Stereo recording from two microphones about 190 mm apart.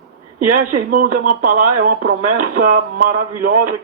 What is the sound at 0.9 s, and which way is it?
Speech, 45° right (ahead or behind).